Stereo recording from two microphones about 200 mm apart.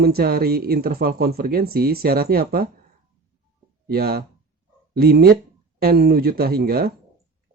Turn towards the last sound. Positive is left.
turn(degrees=-50)  # may be behind; listen again after turning